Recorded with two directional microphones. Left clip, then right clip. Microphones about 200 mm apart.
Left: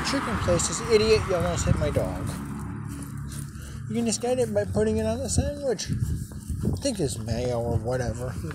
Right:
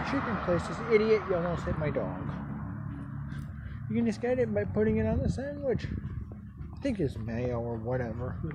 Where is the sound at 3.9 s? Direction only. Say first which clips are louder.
Left 4 dB; 5° right (ahead or behind).